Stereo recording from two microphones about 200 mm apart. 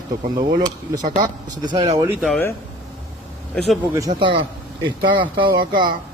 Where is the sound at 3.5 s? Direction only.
Centre (ahead or behind).